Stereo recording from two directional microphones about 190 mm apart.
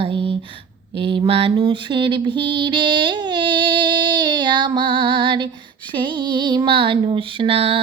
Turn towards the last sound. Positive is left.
turn(degrees=-30)  # may be behind; listen again after turning